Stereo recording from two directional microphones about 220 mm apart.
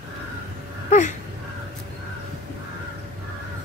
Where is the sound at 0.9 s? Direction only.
35° left (ahead or behind).